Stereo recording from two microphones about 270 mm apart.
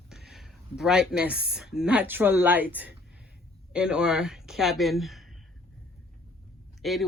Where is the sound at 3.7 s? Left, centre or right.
Centre.